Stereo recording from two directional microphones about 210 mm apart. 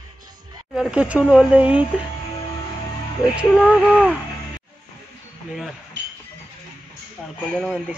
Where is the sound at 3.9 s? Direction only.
5° right (ahead or behind).